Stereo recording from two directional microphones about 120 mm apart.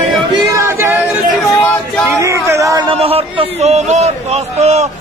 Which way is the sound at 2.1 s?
25° right (ahead or behind).